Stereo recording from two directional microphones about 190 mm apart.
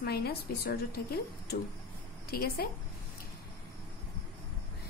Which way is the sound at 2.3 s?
55° left (ahead or behind).